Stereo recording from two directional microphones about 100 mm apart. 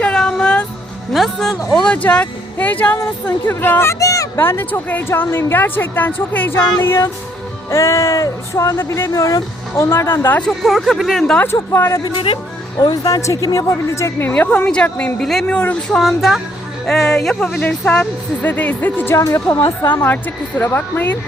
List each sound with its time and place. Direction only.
0.0 s music: 10° left (ahead or behind)
1.1 s speech: centre (ahead or behind); by 10.4 s 20° left (ahead or behind)
10.4 s speech: centre (ahead or behind)
11.5 s speech: 25° left (ahead or behind)
12.0 s speech: 55° left (ahead or behind)
12.8 s speech: 40° left (ahead or behind); by 19.2 s 20° left (ahead or behind)
19.2 s speech: 30° left (ahead or behind)
19.9 s speech: 20° left (ahead or behind)